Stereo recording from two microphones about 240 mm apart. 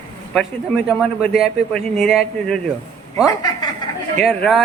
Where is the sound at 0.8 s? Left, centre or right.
Centre.